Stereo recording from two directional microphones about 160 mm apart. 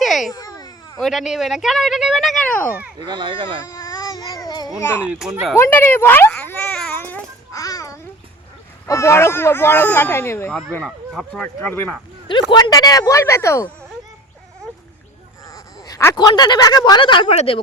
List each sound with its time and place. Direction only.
0.0 s babbling: centre (ahead or behind)
0.3 s babbling: 25° left (ahead or behind)
0.9 s speech: centre (ahead or behind)
3.1 s speech: 30° right (ahead or behind)
3.7 s baby cry: 20° left (ahead or behind)
4.8 s speech: 15° left (ahead or behind)
5.5 s babbling: 15° left (ahead or behind)
7.6 s babbling: 20° left (ahead or behind)
8.9 s speech: 15° left (ahead or behind)
10.5 s speech: 5° left (ahead or behind)
11.4 s speech: 10° left (ahead or behind)
12.3 s speech: 30° left (ahead or behind)
15.5 s speech: 20° left (ahead or behind); by 17.6 s 35° left (ahead or behind)